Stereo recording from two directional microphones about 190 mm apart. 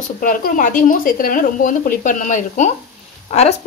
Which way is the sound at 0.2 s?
45° left (ahead or behind).